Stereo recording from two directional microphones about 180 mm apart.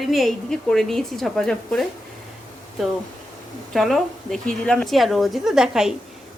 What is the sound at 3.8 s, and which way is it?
Speech, centre (ahead or behind).